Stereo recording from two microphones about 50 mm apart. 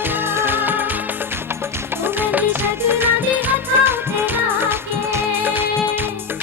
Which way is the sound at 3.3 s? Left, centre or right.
Right.